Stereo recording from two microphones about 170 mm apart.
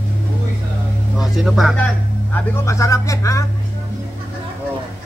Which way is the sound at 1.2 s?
Centre (ahead or behind).